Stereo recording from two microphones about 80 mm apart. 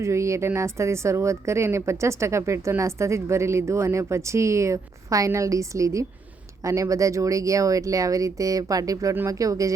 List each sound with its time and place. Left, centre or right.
0.0 s speech: right